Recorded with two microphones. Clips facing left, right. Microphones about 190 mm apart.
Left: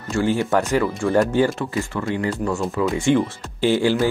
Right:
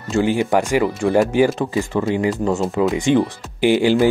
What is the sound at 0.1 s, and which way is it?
Speech, 15° right (ahead or behind).